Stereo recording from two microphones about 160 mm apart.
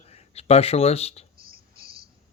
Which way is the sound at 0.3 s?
40° left (ahead or behind).